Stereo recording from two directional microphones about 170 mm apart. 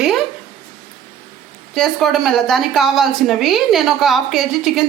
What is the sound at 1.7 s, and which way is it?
A woman's voice, centre (ahead or behind).